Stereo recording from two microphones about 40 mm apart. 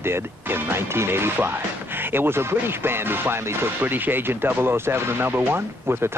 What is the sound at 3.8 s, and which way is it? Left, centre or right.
Speech, right.